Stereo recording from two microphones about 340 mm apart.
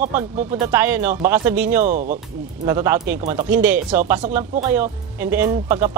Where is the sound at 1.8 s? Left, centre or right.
Right.